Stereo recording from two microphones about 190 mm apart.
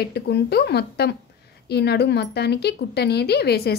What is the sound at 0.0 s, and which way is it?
Speech, 60° left (ahead or behind).